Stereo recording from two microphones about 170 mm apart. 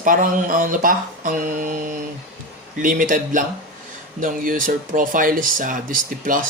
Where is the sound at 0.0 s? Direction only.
50° right (ahead or behind).